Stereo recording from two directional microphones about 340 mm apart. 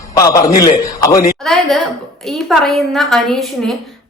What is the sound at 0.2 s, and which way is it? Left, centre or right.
Speech, centre.